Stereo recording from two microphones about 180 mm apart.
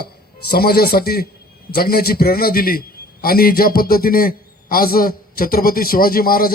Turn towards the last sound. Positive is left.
turn(degrees=55)  # may be behind; listen again after turning